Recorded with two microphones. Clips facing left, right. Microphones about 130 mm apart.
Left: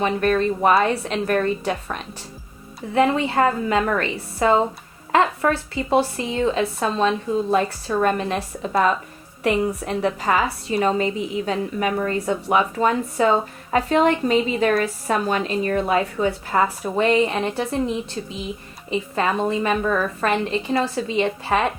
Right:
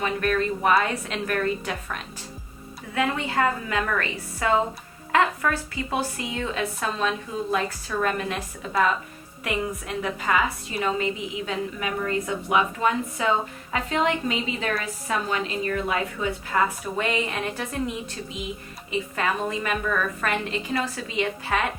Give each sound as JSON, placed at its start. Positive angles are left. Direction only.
{"t": 0.0, "sound": "a woman's voice", "side_deg": 30}
{"t": 2.9, "sound": "a woman's voice", "side_deg": 30}
{"t": 18.9, "sound": "a woman's voice", "side_deg": 30}